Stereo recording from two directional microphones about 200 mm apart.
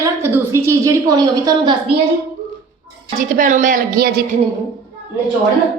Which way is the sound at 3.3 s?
40° right (ahead or behind).